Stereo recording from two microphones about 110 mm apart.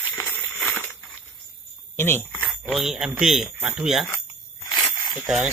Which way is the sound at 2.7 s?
5° right (ahead or behind).